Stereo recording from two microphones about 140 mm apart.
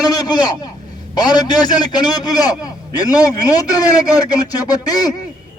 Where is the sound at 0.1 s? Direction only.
30° left (ahead or behind).